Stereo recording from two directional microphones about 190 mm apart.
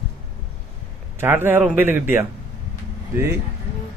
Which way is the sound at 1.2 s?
10° right (ahead or behind).